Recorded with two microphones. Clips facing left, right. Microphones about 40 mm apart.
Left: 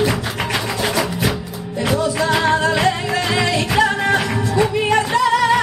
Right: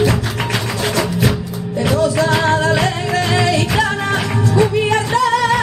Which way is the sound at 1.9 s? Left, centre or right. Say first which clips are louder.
Right 3 dB; centre.